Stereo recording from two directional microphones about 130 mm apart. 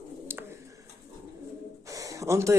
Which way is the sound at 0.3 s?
20° right (ahead or behind).